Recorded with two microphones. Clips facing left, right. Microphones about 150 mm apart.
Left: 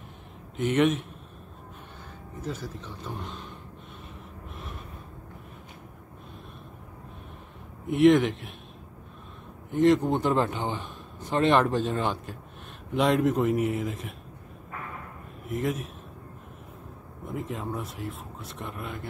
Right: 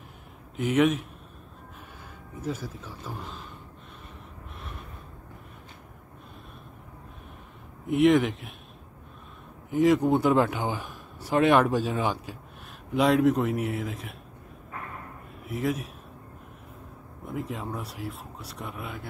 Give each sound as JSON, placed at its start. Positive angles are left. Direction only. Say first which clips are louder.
{"t": 0.6, "sound": "speech", "louder": "even", "side_deg": -5}
{"t": 2.4, "sound": "speech", "louder": "right 2 dB", "side_deg": -10}
{"t": 4.6, "sound": "gasp", "louder": "left 1 dB", "side_deg": 0}
{"t": 7.8, "sound": "speech", "louder": "left 1 dB", "side_deg": 0}
{"t": 9.7, "sound": "a man's voice", "louder": "even", "side_deg": -5}
{"t": 15.4, "sound": "speech", "louder": "even", "side_deg": 0}
{"t": 17.2, "sound": "speech", "louder": "even", "side_deg": 0}